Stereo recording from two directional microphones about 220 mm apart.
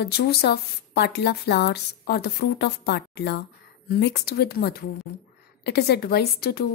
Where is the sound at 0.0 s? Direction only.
45° left (ahead or behind).